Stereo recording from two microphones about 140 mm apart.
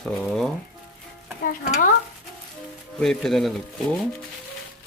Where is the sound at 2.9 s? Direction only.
Centre (ahead or behind).